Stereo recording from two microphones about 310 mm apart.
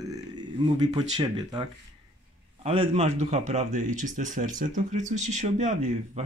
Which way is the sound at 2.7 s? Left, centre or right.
Centre.